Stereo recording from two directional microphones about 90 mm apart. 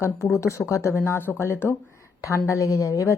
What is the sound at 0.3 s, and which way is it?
A woman's voice, 35° left (ahead or behind).